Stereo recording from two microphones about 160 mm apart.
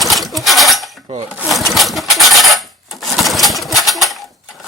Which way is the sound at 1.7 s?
Centre (ahead or behind).